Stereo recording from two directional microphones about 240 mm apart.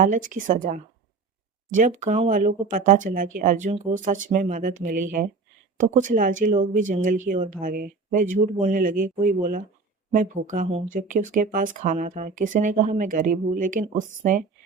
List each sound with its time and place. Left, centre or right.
0.0 s speech: right